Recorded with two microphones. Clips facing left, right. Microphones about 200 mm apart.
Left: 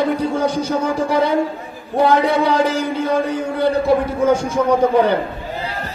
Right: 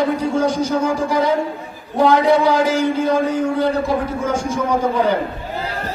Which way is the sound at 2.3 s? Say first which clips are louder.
Right 1 dB; 60° left (ahead or behind).